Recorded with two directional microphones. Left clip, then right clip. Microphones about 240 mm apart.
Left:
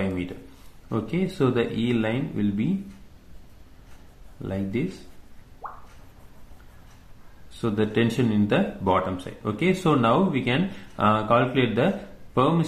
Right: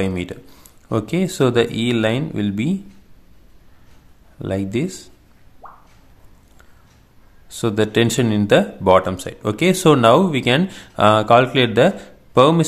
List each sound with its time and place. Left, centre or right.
0.1 s speech: right
4.4 s speech: right
7.4 s speech: right